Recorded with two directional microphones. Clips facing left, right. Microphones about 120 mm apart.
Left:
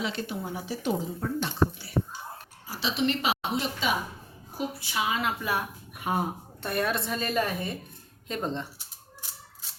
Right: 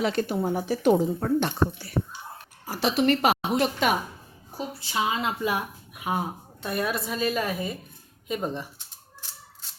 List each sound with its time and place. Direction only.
0.0 s speech: 50° right (ahead or behind)
4.5 s a woman's voice: 30° right (ahead or behind)
6.0 s a woman's voice: centre (ahead or behind)